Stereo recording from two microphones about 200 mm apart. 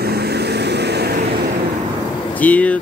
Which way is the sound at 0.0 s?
55° right (ahead or behind).